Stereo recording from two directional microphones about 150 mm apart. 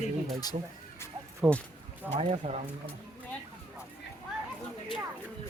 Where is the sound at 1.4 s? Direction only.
15° right (ahead or behind).